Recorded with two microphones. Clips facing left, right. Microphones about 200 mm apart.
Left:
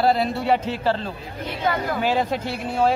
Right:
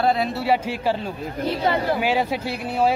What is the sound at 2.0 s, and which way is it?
Speech, 10° right (ahead or behind).